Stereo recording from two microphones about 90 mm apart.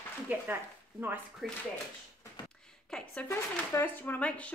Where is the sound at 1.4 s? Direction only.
Centre (ahead or behind).